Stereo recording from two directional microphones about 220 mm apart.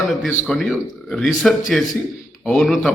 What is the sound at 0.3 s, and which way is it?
A man's voice, centre (ahead or behind).